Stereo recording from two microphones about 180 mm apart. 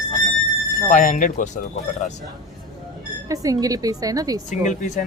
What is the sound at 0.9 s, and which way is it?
Speech, 45° left (ahead or behind).